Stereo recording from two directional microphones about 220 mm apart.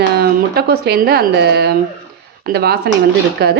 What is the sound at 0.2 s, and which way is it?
Speech, 45° right (ahead or behind).